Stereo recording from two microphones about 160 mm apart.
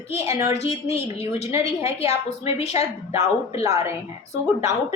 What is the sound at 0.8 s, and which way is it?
Speech, 40° left (ahead or behind).